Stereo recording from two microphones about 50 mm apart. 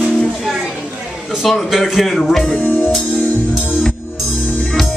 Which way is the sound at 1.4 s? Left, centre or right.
Centre.